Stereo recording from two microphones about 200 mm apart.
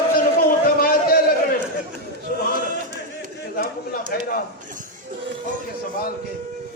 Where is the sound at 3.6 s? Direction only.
45° left (ahead or behind).